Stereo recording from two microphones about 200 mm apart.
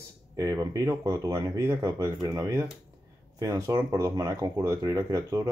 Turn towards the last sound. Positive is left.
turn(degrees=-15)  # may be behind; listen again after turning